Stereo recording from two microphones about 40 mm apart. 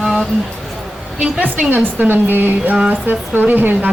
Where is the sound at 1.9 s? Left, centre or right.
Right.